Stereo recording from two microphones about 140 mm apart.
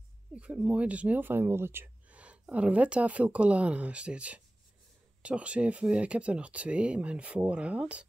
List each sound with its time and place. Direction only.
0.3 s speech: 10° right (ahead or behind)